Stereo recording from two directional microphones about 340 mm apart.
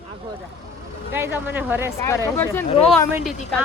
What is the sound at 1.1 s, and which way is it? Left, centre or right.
Speech, centre.